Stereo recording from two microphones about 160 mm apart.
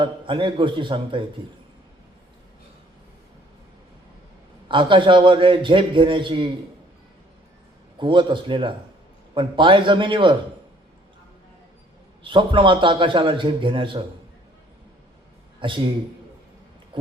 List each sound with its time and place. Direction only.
0.0 s a man's voice: 30° right (ahead or behind)
4.7 s a man's voice: 30° right (ahead or behind)
7.9 s a man's voice: 30° right (ahead or behind)
12.2 s a man's voice: 30° right (ahead or behind)
15.6 s a man's voice: 30° right (ahead or behind)
16.9 s a sound: 30° right (ahead or behind)